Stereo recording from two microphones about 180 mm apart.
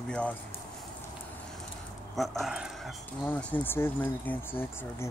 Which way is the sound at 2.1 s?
Centre (ahead or behind).